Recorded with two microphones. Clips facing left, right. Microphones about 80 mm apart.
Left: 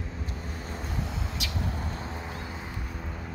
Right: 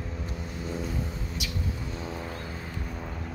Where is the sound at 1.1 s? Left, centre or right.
Left.